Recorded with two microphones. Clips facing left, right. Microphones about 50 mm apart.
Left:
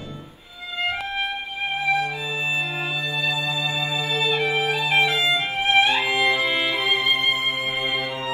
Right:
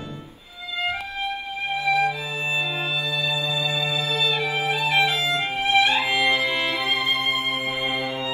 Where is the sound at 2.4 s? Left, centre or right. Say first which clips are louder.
Left 2 dB; left.